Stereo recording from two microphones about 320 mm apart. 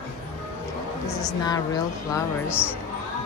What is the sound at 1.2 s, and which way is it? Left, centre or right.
A woman's voice, centre.